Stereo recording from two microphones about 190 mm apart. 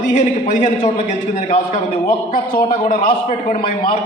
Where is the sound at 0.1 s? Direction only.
40° left (ahead or behind).